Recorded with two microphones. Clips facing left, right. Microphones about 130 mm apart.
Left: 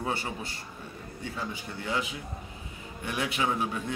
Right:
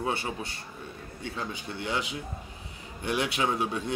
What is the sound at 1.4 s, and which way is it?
Speech, 25° right (ahead or behind).